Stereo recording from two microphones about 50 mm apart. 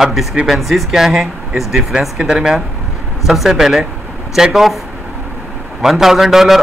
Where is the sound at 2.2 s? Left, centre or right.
Centre.